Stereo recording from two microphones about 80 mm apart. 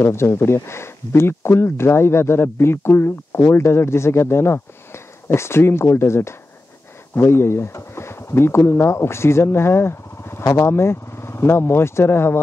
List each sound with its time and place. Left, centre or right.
0.0 s speech: left